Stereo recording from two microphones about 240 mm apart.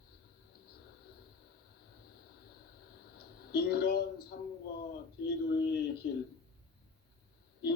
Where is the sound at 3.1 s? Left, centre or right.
Left.